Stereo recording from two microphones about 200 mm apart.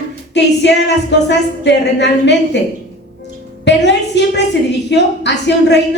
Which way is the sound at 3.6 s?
60° left (ahead or behind).